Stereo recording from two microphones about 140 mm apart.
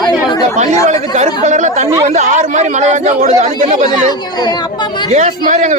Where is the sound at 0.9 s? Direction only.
55° right (ahead or behind).